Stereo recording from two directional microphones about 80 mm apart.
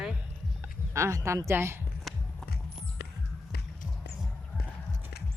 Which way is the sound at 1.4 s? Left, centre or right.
Right.